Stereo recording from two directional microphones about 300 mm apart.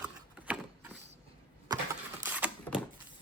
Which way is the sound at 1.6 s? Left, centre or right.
Centre.